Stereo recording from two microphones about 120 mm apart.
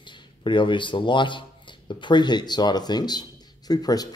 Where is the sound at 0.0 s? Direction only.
40° left (ahead or behind).